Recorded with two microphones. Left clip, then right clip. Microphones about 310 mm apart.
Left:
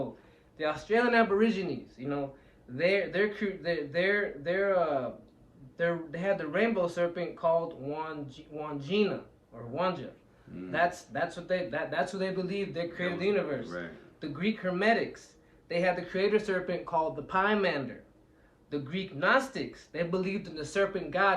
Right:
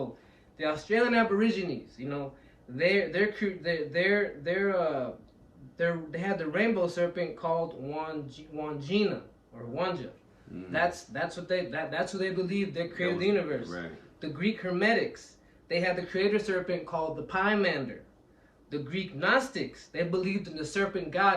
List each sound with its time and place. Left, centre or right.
0.5 s speech: centre